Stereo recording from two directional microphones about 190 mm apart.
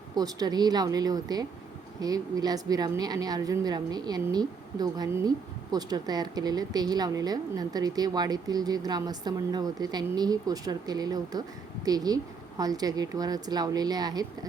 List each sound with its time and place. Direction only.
0.2 s a woman's voice: 20° right (ahead or behind)